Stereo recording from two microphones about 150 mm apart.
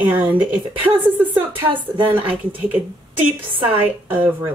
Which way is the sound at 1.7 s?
35° right (ahead or behind).